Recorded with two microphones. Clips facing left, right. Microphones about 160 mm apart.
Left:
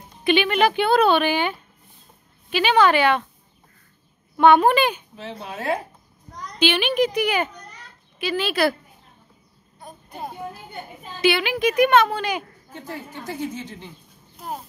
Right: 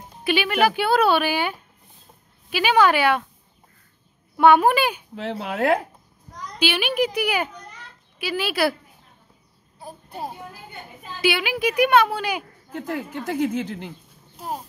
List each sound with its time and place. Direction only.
0.2 s speech: 5° right (ahead or behind)
4.4 s speech: 10° right (ahead or behind)
5.1 s a woman's voice: 65° right (ahead or behind)
6.6 s speech: 10° right (ahead or behind)
9.8 s a sound: 5° right (ahead or behind)
11.1 s speech: 10° right (ahead or behind)
12.7 s a woman's voice: 65° right (ahead or behind)